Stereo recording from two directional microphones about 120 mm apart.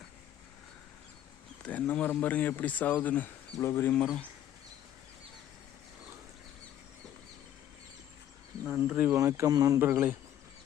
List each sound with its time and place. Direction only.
1.6 s speech: 10° left (ahead or behind)
3.9 s speech: centre (ahead or behind)
8.6 s speech: 5° right (ahead or behind)
9.0 s speech: 25° right (ahead or behind)